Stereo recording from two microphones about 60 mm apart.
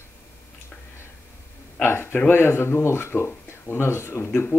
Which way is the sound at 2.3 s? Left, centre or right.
Left.